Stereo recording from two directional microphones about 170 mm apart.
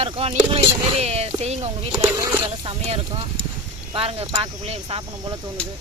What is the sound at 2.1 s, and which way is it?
Speech, 20° right (ahead or behind).